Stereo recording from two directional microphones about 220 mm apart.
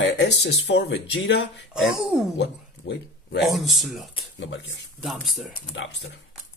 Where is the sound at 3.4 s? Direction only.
Centre (ahead or behind).